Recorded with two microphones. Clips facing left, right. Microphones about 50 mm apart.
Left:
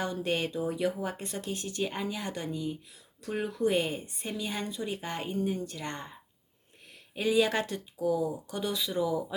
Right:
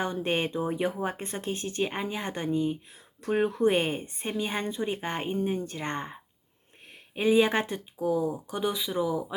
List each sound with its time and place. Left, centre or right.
0.0 s a woman's voice: right
7.2 s speech: right